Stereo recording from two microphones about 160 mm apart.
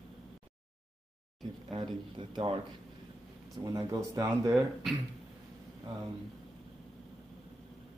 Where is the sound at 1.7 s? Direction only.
30° right (ahead or behind).